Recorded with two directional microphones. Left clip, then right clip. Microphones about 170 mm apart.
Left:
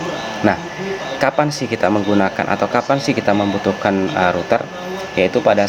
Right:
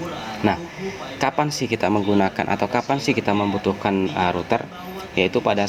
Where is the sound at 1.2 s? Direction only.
45° right (ahead or behind).